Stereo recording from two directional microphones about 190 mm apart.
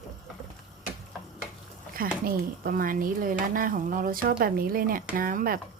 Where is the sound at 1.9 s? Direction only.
50° right (ahead or behind).